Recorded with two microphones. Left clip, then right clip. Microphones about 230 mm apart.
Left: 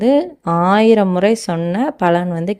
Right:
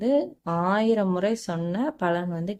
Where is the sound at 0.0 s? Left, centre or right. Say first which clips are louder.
Left 9 dB; left.